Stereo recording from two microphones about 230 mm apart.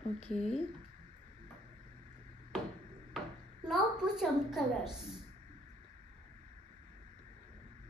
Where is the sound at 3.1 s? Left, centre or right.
Centre.